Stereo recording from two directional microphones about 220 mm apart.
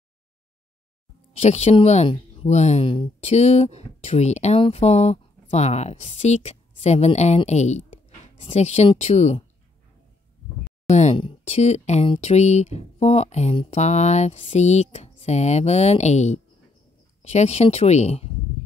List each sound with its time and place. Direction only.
1.3 s speech: 30° left (ahead or behind)
10.9 s speech: 30° left (ahead or behind)